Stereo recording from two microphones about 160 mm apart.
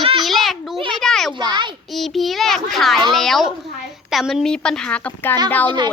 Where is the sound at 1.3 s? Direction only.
30° right (ahead or behind).